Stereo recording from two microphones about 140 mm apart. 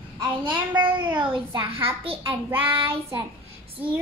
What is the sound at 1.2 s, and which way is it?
Speech, 35° right (ahead or behind).